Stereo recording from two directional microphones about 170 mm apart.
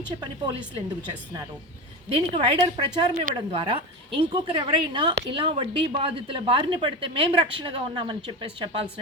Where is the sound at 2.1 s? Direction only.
35° right (ahead or behind).